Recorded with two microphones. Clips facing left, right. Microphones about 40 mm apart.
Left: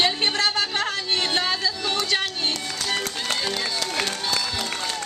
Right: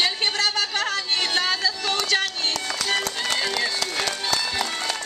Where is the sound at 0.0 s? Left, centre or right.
Centre.